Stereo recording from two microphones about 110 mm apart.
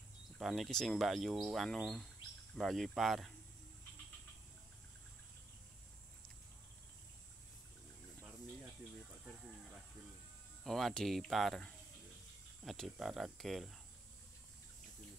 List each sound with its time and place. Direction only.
0.4 s speech: centre (ahead or behind)
10.6 s speech: 5° left (ahead or behind)